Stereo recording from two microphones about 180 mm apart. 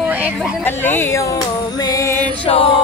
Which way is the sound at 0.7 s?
10° left (ahead or behind).